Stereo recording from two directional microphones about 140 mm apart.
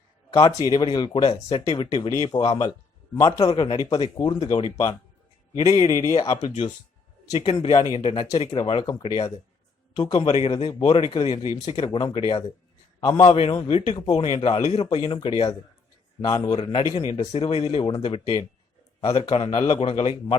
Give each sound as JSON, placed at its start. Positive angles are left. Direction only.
{"t": 0.3, "sound": "a man's voice", "side_deg": 40}
{"t": 6.2, "sound": "speech", "side_deg": 40}
{"t": 7.6, "sound": "speech", "side_deg": 35}
{"t": 8.6, "sound": "a man's voice", "side_deg": 35}
{"t": 13.2, "sound": "speech", "side_deg": 40}
{"t": 14.8, "sound": "speech", "side_deg": 35}
{"t": 16.2, "sound": "speech", "side_deg": 25}
{"t": 16.6, "sound": "speech", "side_deg": 40}